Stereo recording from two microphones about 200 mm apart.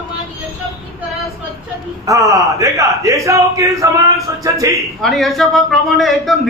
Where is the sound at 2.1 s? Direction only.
15° right (ahead or behind).